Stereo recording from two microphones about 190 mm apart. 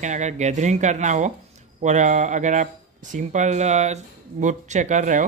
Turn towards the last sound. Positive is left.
turn(degrees=-40)  # may be behind; listen again after turning